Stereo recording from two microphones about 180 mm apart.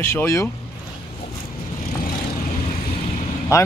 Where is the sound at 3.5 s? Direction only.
15° left (ahead or behind).